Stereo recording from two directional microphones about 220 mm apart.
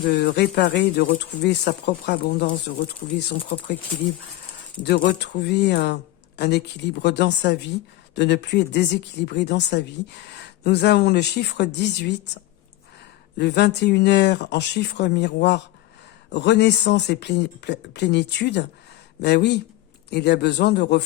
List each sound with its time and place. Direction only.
0.1 s speech: 50° left (ahead or behind)
4.8 s speech: 50° left (ahead or behind)
13.4 s speech: 50° left (ahead or behind)